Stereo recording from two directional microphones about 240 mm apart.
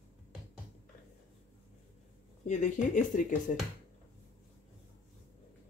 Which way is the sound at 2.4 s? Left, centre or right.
Left.